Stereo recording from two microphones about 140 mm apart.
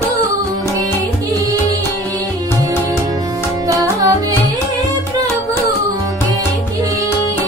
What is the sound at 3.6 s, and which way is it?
Music, 25° right (ahead or behind).